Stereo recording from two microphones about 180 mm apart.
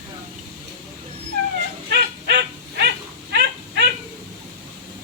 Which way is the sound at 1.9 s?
65° right (ahead or behind).